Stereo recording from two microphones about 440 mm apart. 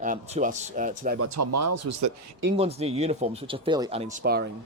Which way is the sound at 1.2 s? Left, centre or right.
Right.